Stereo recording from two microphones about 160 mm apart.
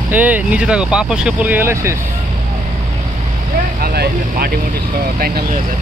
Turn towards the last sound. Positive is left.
turn(degrees=-75)  # may be behind; listen again after turning